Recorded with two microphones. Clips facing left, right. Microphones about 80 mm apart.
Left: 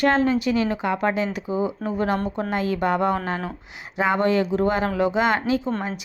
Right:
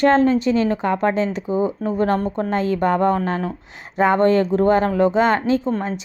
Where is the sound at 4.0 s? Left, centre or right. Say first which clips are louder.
Right 5 dB; right.